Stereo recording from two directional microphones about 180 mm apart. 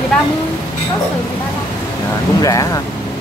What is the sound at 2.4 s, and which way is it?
Speech, 20° left (ahead or behind).